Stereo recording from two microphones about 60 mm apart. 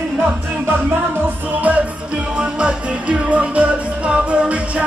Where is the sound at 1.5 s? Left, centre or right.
Right.